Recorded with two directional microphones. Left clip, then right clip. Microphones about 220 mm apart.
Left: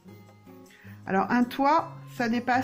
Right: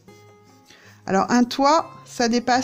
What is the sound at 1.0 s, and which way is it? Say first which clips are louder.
A woman's voice: right 6 dB; 55° right (ahead or behind).